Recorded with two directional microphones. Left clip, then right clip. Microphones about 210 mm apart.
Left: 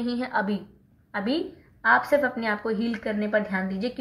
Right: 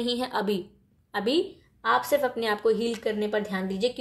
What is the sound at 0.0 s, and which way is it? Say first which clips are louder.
A woman's voice: even; 50° right (ahead or behind).